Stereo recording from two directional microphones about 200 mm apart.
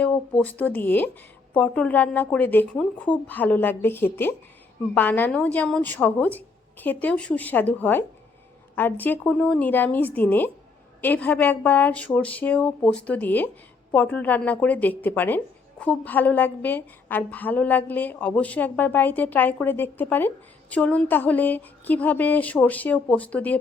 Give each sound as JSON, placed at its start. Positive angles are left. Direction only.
{"t": 0.0, "sound": "a woman's voice", "side_deg": 5}